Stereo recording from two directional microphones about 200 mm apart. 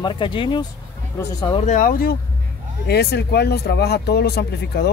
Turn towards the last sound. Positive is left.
turn(degrees=55)  # may be behind; listen again after turning